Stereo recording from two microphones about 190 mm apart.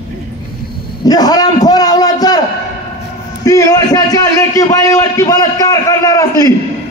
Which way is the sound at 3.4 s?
20° left (ahead or behind).